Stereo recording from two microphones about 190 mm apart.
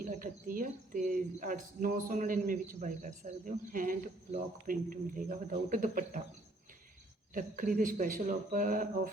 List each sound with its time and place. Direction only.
0.0 s speech: 45° right (ahead or behind)
7.3 s speech: 45° right (ahead or behind)